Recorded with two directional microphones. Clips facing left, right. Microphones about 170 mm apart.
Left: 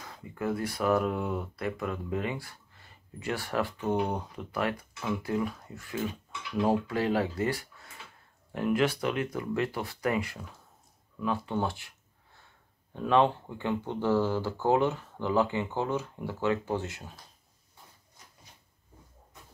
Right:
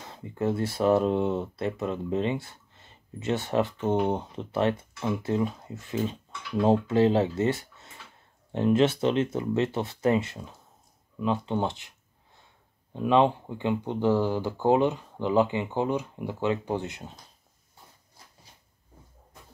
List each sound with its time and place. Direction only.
0.0 s speech: 30° right (ahead or behind)
12.9 s speech: 15° right (ahead or behind)